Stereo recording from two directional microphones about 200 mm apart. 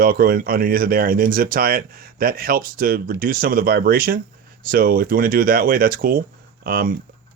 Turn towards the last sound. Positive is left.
turn(degrees=-45)  # may be behind; listen again after turning